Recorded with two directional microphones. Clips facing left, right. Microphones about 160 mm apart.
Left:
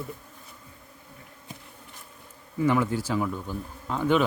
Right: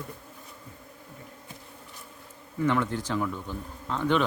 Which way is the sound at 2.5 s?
10° left (ahead or behind).